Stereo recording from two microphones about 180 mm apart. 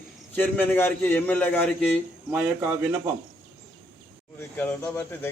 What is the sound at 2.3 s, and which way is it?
Speech, 10° right (ahead or behind).